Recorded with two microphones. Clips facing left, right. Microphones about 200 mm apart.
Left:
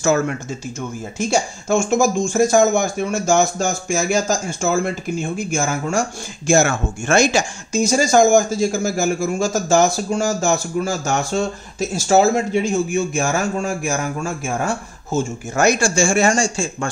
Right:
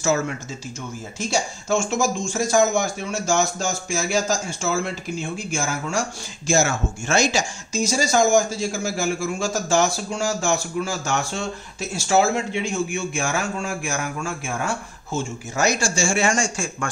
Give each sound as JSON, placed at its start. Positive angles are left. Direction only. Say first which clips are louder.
{"t": 0.0, "sound": "speech", "louder": "left 4 dB", "side_deg": 55}
{"t": 15.1, "sound": "speech", "louder": "left 5 dB", "side_deg": 55}